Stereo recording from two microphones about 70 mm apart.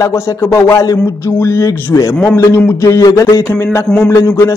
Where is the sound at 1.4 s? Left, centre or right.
Left.